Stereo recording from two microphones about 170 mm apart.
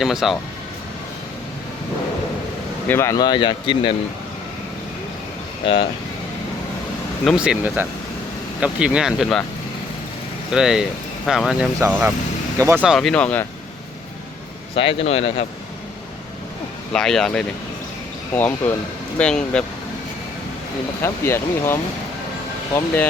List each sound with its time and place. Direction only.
0.0 s speech: centre (ahead or behind)
2.8 s speech: 15° left (ahead or behind)
5.6 s speech: 35° left (ahead or behind)
7.3 s speech: 5° right (ahead or behind)
10.5 s speech: 5° right (ahead or behind)
14.8 s speech: 30° left (ahead or behind)
16.9 s speech: 5° left (ahead or behind)
21.0 s speech: 15° left (ahead or behind)